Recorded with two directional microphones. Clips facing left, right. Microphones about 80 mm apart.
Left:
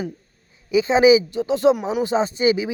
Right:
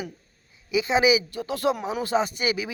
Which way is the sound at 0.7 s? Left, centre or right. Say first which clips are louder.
Left 7 dB; left.